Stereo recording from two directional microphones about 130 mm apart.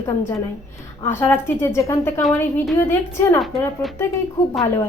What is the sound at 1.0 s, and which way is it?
Speech, 20° left (ahead or behind).